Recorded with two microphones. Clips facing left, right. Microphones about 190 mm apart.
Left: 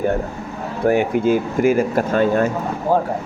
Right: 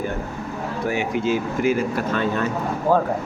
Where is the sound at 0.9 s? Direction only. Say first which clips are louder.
Left 7 dB; 55° left (ahead or behind).